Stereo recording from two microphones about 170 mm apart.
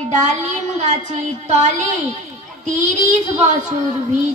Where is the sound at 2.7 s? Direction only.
45° right (ahead or behind).